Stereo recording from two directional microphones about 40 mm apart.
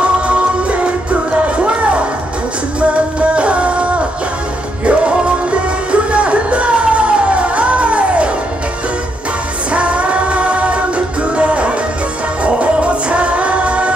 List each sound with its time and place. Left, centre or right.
0.3 s music: right
9.7 s music: right